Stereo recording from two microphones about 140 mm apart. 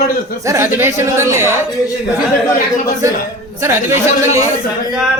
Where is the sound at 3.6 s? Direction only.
20° right (ahead or behind).